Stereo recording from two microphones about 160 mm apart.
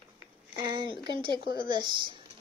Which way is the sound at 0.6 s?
30° right (ahead or behind).